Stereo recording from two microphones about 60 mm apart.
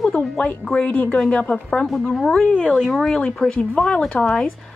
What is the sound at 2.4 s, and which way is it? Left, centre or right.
Speech, centre.